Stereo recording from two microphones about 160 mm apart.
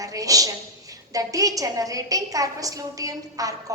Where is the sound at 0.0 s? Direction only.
20° right (ahead or behind).